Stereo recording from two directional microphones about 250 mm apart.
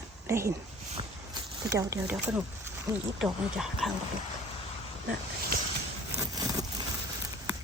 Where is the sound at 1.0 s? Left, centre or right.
Right.